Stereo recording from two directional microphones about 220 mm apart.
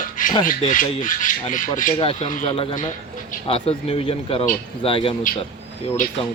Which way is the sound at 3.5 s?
25° left (ahead or behind).